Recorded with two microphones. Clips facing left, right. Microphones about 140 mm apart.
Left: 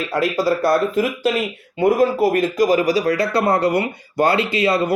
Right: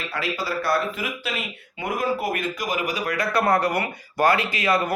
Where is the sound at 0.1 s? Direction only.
40° left (ahead or behind).